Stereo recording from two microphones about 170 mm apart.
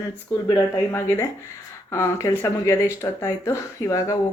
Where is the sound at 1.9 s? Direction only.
15° left (ahead or behind).